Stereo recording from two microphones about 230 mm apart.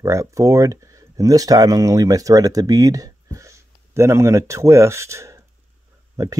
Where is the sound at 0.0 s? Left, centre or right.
Centre.